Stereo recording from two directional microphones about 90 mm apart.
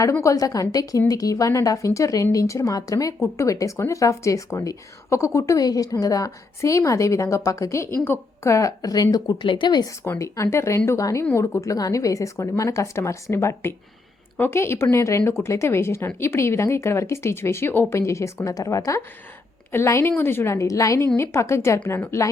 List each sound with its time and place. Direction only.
0.0 s speech: 35° left (ahead or behind)
9.1 s speech: 55° left (ahead or behind)
10.0 s speech: 35° left (ahead or behind)